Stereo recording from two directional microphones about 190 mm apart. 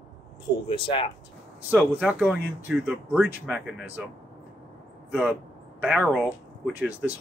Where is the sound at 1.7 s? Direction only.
5° right (ahead or behind).